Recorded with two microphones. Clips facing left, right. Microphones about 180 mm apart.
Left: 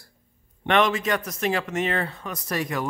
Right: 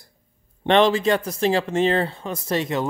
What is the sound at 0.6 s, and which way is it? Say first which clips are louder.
Speech: right 5 dB; 30° right (ahead or behind).